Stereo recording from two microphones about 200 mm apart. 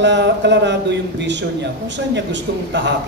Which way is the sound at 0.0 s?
60° right (ahead or behind).